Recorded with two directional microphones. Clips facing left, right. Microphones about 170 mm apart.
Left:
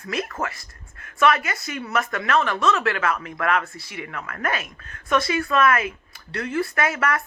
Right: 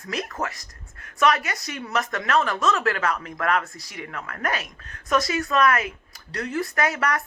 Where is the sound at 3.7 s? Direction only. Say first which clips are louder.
Left 3 dB; 40° right (ahead or behind).